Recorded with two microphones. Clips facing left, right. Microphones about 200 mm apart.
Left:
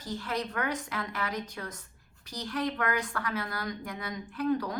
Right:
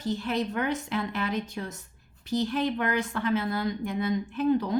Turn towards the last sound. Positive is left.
turn(degrees=-25)  # may be behind; listen again after turning